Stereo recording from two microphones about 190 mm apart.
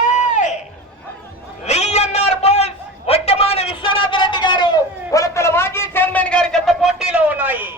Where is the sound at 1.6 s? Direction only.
35° left (ahead or behind); by 7.7 s 10° right (ahead or behind).